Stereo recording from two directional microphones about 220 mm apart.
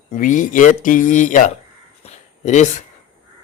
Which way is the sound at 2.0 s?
30° left (ahead or behind).